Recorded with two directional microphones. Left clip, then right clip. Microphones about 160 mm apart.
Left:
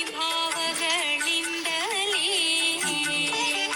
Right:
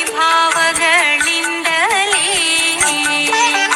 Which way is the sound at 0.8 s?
40° right (ahead or behind).